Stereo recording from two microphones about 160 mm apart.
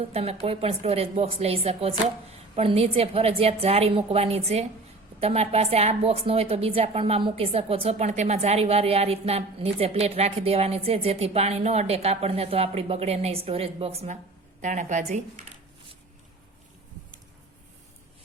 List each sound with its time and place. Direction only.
0.0 s a woman's voice: 40° right (ahead or behind)